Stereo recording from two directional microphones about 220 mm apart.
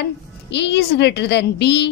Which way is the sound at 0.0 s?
50° left (ahead or behind).